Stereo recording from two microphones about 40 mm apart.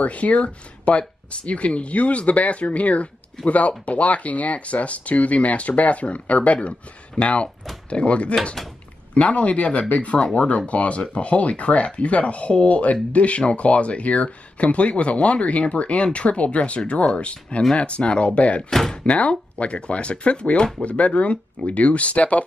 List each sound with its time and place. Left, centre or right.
0.0 s speech: left
18.6 s speech: centre
19.0 s speech: left
20.8 s speech: left